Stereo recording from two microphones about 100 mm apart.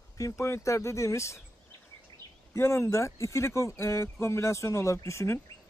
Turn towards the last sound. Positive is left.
turn(degrees=30)  # may be behind; listen again after turning